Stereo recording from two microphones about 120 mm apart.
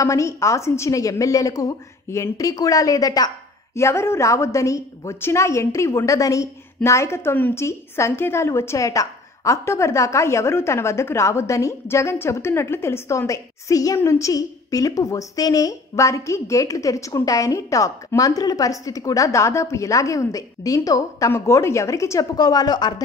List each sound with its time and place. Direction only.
0.0 s a woman's voice: 25° left (ahead or behind)
22.4 s speech: 35° left (ahead or behind)